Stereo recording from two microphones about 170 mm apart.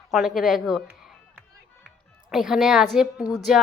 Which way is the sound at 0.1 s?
Centre (ahead or behind).